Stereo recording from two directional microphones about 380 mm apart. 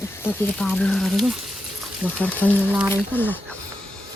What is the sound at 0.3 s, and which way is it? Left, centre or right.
Speech, centre.